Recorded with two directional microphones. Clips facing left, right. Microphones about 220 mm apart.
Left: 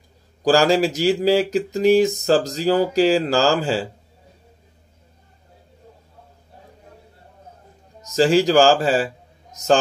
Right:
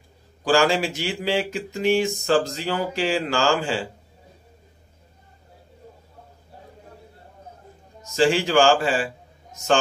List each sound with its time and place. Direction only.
0.4 s speech: 40° left (ahead or behind)
8.1 s a man's voice: 40° left (ahead or behind)